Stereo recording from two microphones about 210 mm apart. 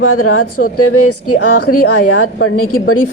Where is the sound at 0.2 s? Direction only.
90° left.